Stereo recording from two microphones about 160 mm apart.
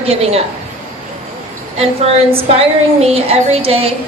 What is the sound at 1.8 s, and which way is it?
A woman's voice, 40° right (ahead or behind).